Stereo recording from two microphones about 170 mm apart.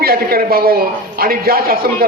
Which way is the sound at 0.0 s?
60° right (ahead or behind).